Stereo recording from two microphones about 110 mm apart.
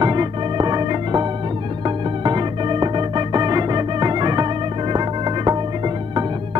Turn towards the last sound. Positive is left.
turn(degrees=-45)  # may be behind; listen again after turning